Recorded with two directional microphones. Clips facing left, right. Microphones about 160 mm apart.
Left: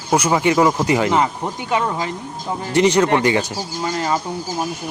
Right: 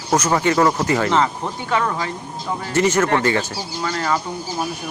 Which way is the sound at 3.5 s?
45° left (ahead or behind).